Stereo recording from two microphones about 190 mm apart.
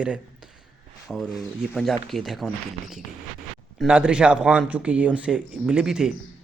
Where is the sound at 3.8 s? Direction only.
5° right (ahead or behind).